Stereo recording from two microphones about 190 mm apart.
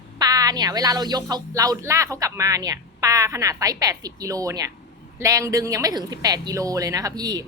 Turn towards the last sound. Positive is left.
turn(degrees=-20)  # may be behind; listen again after turning